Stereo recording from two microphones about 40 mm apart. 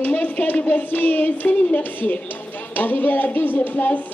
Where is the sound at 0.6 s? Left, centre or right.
Left.